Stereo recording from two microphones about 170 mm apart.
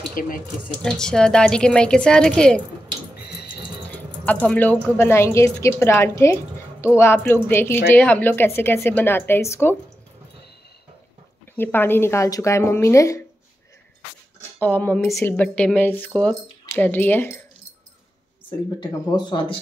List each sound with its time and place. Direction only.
0.1 s speech: 55° left (ahead or behind)
0.8 s a woman's voice: 5° left (ahead or behind)
3.9 s speech: 10° left (ahead or behind)
11.5 s speech: 10° left (ahead or behind)
14.6 s speech: 10° left (ahead or behind)
18.8 s speech: 25° left (ahead or behind)